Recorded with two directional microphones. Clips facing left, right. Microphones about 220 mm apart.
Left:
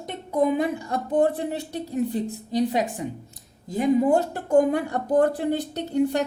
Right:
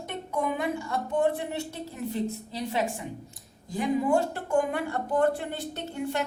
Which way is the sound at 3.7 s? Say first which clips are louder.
Left 5 dB; 40° left (ahead or behind).